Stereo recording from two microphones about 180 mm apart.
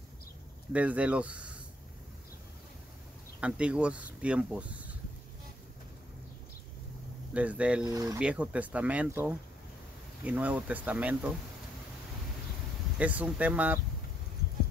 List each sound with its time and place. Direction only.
0.7 s speech: 5° right (ahead or behind)
3.3 s speech: 5° right (ahead or behind)
7.3 s speech: 5° right (ahead or behind)
7.8 s speech: 20° right (ahead or behind)
8.2 s speech: 5° right (ahead or behind)
12.9 s speech: 10° right (ahead or behind)